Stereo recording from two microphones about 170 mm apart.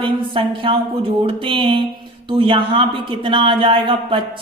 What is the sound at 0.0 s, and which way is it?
Speech, 30° right (ahead or behind).